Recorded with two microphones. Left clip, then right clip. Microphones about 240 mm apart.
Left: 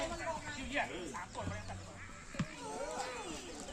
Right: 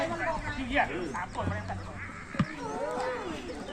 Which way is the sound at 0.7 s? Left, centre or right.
Left.